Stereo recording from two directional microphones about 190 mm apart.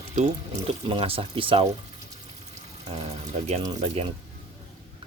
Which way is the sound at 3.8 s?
30° right (ahead or behind).